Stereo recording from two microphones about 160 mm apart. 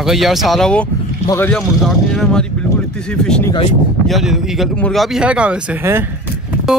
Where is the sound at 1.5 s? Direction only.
Centre (ahead or behind); by 6.0 s 15° right (ahead or behind).